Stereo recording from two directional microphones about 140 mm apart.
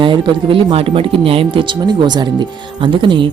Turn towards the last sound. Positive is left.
turn(degrees=-35)  # may be behind; listen again after turning